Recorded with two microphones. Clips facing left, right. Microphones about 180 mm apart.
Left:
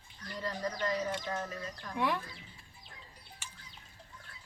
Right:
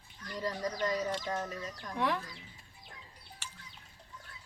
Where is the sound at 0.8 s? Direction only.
25° right (ahead or behind).